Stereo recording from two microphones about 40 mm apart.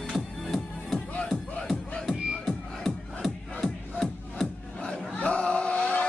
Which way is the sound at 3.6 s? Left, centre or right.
Centre.